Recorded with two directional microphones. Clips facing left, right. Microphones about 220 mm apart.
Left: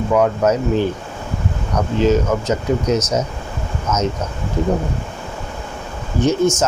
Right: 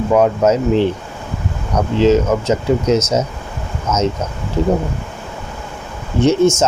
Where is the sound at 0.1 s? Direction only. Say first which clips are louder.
Right 3 dB; 25° right (ahead or behind).